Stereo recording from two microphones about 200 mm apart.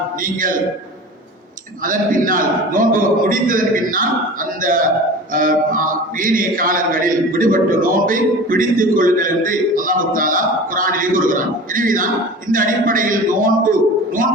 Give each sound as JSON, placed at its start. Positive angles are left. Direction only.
{"t": 0.2, "sound": "a man's voice", "side_deg": -45}
{"t": 1.8, "sound": "a man's voice", "side_deg": -40}